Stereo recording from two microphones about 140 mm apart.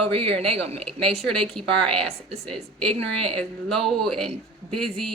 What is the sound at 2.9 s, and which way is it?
Speech, 45° right (ahead or behind).